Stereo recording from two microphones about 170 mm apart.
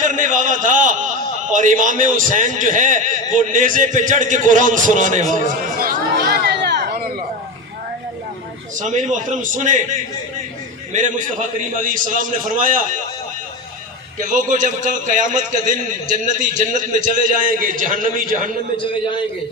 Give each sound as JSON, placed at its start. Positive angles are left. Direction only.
{"t": 0.0, "sound": "a sound", "side_deg": -50}
{"t": 3.3, "sound": "a man's voice", "side_deg": -50}
{"t": 5.3, "sound": "chatter", "side_deg": -50}
{"t": 8.8, "sound": "a man's voice", "side_deg": -45}
{"t": 14.2, "sound": "a man's voice", "side_deg": -50}